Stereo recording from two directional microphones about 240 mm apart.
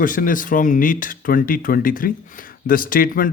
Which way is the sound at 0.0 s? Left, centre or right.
Left.